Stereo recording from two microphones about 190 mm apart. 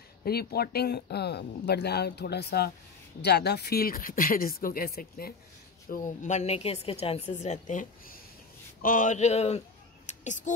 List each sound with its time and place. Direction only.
0.2 s a woman's voice: 55° left (ahead or behind)